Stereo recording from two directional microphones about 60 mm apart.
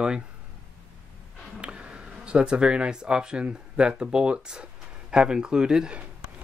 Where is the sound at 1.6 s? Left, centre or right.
Centre.